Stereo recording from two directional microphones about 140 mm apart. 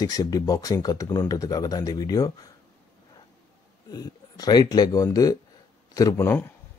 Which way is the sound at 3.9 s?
25° left (ahead or behind).